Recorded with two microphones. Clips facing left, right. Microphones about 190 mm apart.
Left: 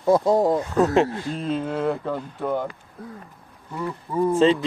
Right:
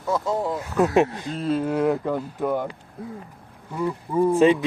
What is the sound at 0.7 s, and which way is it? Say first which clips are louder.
Speech: even; 10° right (ahead or behind).